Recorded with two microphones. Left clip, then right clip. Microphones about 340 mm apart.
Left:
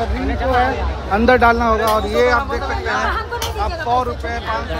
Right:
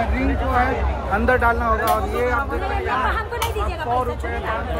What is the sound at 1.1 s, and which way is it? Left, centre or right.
Speech, left.